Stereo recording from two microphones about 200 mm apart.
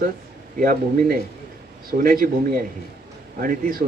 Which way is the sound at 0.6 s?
45° right (ahead or behind).